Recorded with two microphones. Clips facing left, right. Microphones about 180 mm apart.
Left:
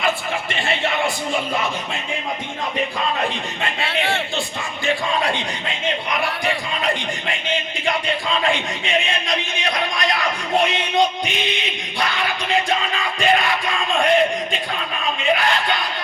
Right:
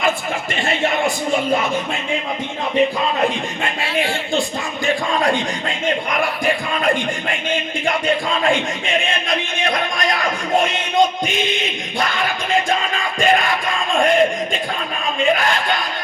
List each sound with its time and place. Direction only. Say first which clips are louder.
0.7 s a sound: right 3 dB; 45° right (ahead or behind)
4.9 s speech: right 3 dB; 45° right (ahead or behind)
7.9 s speech: right 3 dB; 45° right (ahead or behind)
9.3 s music: right 3 dB; 50° right (ahead or behind)
11.9 s music: right 2 dB; 45° right (ahead or behind)
15.2 s a sound: right 3 dB; 45° right (ahead or behind)